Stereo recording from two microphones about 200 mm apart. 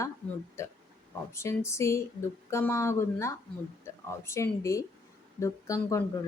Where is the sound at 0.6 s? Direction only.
15° left (ahead or behind).